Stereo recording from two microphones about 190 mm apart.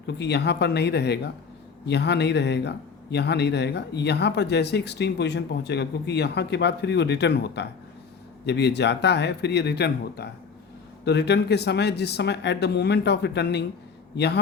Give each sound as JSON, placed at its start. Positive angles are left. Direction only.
{"t": 0.2, "sound": "speech", "side_deg": 65}